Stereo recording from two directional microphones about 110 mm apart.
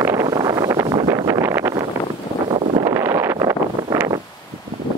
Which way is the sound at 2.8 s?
25° right (ahead or behind).